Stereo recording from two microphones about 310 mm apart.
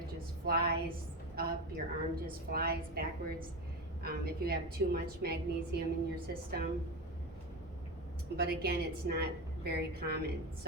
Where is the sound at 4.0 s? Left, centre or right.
Right.